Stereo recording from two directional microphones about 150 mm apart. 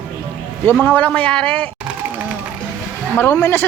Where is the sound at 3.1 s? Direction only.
15° left (ahead or behind).